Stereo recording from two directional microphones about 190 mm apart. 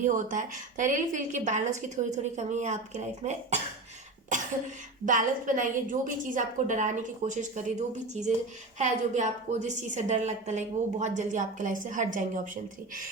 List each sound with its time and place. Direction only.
0.0 s a woman's voice: 40° right (ahead or behind)
5.0 s a woman's voice: 45° right (ahead or behind)